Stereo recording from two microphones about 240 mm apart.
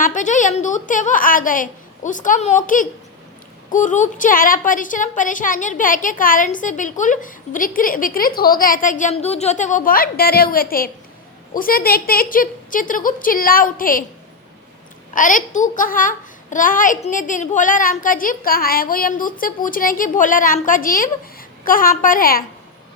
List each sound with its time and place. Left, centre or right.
0.0 s a child's voice: left
15.1 s a child's voice: left